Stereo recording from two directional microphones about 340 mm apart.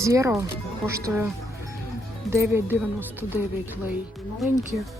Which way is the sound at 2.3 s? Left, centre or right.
Centre.